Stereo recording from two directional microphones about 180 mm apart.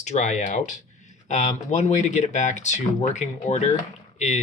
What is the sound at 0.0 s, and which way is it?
Speech, 40° left (ahead or behind).